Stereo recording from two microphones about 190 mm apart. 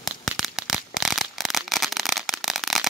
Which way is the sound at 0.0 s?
Centre (ahead or behind).